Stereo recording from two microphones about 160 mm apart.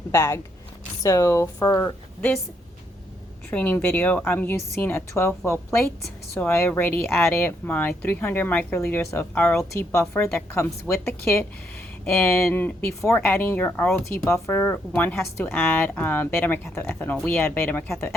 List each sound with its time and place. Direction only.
0.1 s a woman's voice: 15° left (ahead or behind)
3.5 s a woman's voice: 10° left (ahead or behind)
12.0 s a woman's voice: 10° left (ahead or behind)
14.1 s a woman's voice: 15° left (ahead or behind)